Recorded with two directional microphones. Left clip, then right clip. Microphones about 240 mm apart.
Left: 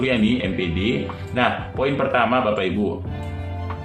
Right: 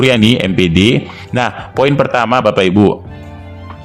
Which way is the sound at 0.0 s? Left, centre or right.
Right.